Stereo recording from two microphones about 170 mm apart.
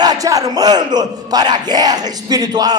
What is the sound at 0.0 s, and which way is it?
Battle cry, 20° right (ahead or behind).